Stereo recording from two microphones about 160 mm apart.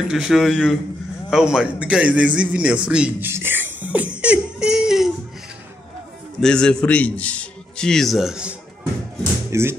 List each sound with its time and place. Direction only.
0.1 s a man's voice: 5° right (ahead or behind)
6.4 s a man's voice: 5° left (ahead or behind)
9.5 s speech: 15° right (ahead or behind)